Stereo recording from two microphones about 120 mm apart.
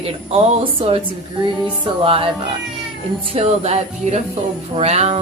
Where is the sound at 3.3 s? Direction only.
60° right (ahead or behind).